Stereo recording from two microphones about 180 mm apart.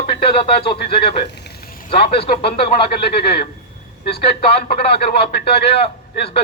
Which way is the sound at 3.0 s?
60° left (ahead or behind).